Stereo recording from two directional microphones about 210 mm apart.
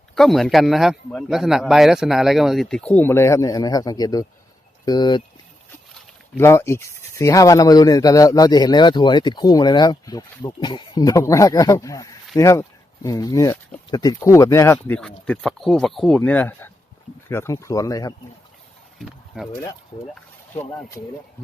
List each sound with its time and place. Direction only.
0.2 s a man's voice: centre (ahead or behind); by 5.2 s 20° left (ahead or behind)
6.3 s speech: 10° left (ahead or behind)
18.9 s a sound: centre (ahead or behind)
20.5 s speech: 10° left (ahead or behind)